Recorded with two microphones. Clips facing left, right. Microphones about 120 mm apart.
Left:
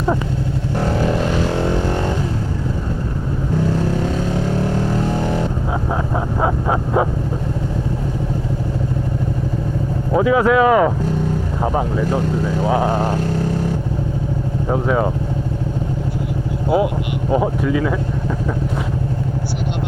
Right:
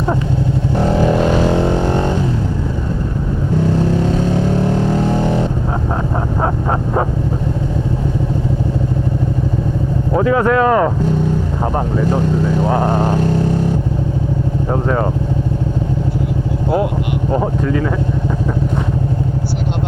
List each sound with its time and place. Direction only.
0.8 s vehicle: 20° right (ahead or behind)
4.9 s vehicle: 25° right (ahead or behind)
6.4 s a sound: 10° left (ahead or behind)
10.2 s speech: 10° left (ahead or behind)
12.9 s speech: 20° right (ahead or behind)
14.7 s speech: 5° left (ahead or behind)
17.3 s speech: 10° left (ahead or behind)